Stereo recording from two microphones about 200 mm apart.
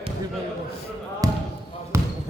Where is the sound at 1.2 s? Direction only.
15° right (ahead or behind).